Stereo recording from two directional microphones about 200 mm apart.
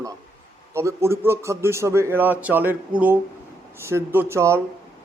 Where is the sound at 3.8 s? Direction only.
10° right (ahead or behind).